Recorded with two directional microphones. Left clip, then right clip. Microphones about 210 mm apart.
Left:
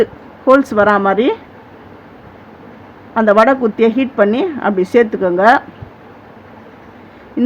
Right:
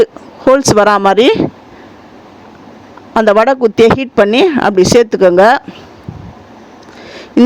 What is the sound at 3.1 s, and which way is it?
Speech, 50° right (ahead or behind).